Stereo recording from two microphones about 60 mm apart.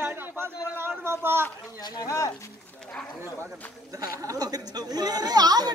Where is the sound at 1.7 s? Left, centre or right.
Left.